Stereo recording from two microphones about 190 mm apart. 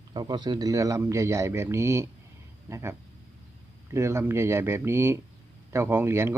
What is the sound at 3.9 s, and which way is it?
Speech, 15° right (ahead or behind).